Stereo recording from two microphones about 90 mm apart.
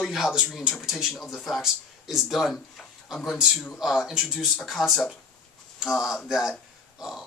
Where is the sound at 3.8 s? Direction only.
5° right (ahead or behind).